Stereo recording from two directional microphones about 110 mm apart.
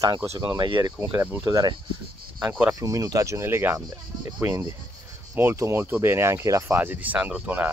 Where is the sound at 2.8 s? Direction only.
30° right (ahead or behind).